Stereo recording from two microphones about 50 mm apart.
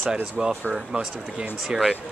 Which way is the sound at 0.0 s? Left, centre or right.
Centre.